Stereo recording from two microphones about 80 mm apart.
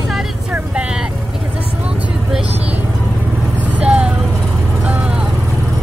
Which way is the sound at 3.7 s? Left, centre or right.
Centre.